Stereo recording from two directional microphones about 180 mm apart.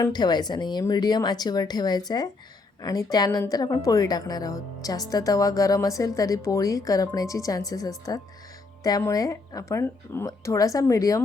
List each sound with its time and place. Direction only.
0.0 s a woman's voice: 25° left (ahead or behind)